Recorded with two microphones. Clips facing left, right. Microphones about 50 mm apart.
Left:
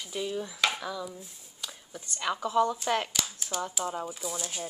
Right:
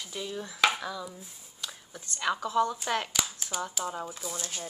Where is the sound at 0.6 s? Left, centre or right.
Centre.